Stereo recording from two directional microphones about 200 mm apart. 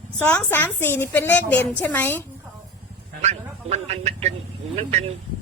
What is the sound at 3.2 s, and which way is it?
Speech, 35° right (ahead or behind).